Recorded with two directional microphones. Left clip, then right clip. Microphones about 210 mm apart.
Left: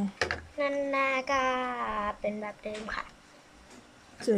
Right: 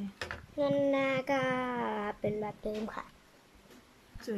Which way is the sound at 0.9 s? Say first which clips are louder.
Left 3 dB; 40° right (ahead or behind).